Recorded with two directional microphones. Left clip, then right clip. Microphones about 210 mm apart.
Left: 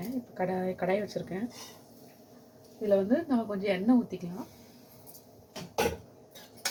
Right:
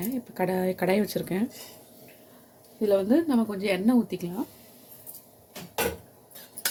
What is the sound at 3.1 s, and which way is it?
Speech, 50° right (ahead or behind).